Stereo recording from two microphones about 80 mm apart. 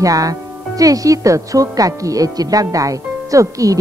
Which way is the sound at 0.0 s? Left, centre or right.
Right.